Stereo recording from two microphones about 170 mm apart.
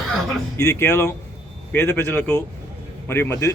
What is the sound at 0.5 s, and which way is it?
A man's voice, 15° left (ahead or behind).